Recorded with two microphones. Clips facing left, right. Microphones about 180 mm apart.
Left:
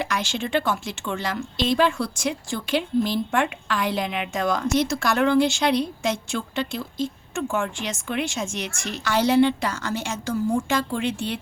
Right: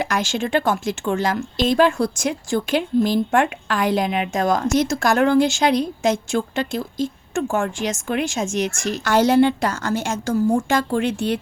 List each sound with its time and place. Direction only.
0.0 s a woman's voice: 45° right (ahead or behind)